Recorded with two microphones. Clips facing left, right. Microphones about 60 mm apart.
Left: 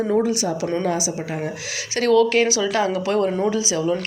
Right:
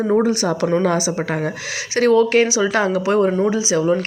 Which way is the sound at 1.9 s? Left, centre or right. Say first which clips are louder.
Right 3 dB; right.